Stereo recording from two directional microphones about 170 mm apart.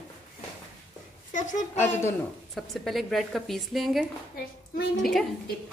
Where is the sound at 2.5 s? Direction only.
Centre (ahead or behind).